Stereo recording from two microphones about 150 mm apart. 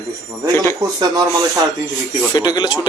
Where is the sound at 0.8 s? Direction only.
25° right (ahead or behind).